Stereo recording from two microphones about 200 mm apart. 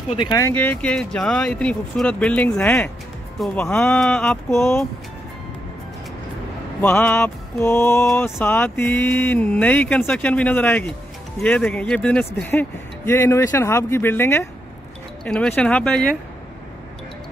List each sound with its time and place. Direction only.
0.1 s speech: 25° left (ahead or behind)
0.4 s speech: 10° left (ahead or behind)
6.8 s mantra: 10° left (ahead or behind)
11.4 s speech: 5° left (ahead or behind)
12.4 s mantra: 10° left (ahead or behind)
15.2 s speech: 5° left (ahead or behind)